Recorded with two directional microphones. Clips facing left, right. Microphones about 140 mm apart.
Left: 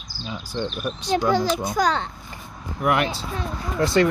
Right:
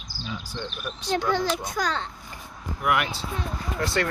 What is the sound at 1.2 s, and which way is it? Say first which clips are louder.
Speech: left 5 dB; 35° left (ahead or behind).